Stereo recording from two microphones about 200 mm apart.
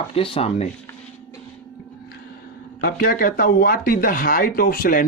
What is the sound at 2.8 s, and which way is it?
Speech, 45° left (ahead or behind).